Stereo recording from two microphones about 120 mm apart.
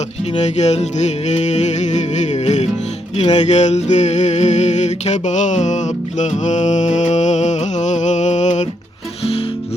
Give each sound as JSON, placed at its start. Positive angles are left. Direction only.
{"t": 0.6, "sound": "music", "side_deg": 70}